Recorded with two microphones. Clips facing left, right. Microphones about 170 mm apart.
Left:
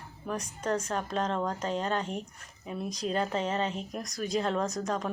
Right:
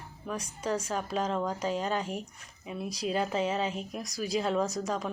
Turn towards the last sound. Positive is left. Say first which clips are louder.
# even
turn(degrees=-5)  # may be behind; listen again after turning